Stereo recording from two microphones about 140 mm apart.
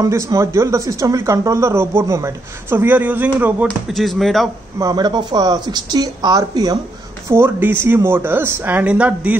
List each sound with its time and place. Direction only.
0.0 s speech: 20° right (ahead or behind)
3.6 s speech: centre (ahead or behind)
4.7 s speech: 25° right (ahead or behind)
7.2 s speech: 15° right (ahead or behind)